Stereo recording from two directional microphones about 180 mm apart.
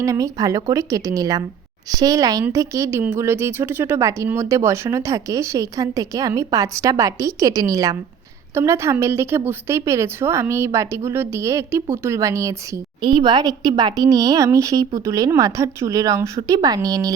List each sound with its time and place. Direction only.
0.0 s a woman's voice: 20° right (ahead or behind)